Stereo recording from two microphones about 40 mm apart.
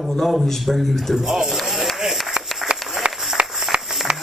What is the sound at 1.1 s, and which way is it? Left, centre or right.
Speech, centre.